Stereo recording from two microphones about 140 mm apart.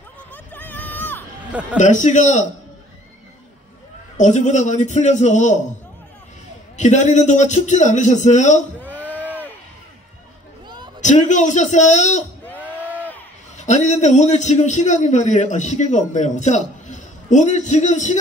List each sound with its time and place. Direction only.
0.3 s a sound: 10° left (ahead or behind)
1.5 s a man's voice: 10° right (ahead or behind)
1.8 s a man's voice: 60° left (ahead or behind)
4.2 s a man's voice: 60° left (ahead or behind)
6.8 s a man's voice: 60° left (ahead or behind)
11.0 s a man's voice: 60° left (ahead or behind)
12.4 s a sound: 10° left (ahead or behind)
13.6 s a man's voice: 55° left (ahead or behind)